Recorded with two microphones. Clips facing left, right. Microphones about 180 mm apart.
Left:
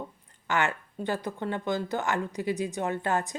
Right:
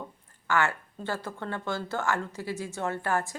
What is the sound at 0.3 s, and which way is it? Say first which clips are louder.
Speech: right 1 dB; 20° left (ahead or behind).